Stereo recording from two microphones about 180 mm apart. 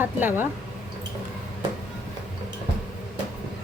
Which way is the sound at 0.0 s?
10° right (ahead or behind).